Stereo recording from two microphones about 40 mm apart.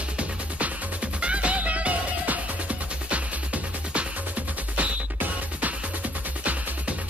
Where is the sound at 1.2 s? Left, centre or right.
Right.